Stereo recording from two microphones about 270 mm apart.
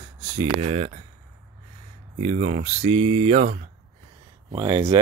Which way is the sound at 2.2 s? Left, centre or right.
Right.